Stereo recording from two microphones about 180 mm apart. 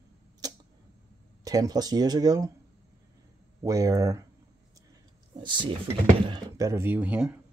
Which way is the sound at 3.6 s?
20° right (ahead or behind).